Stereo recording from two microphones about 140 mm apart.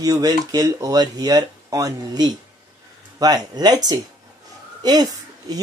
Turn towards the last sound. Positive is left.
turn(degrees=-30)  # may be behind; listen again after turning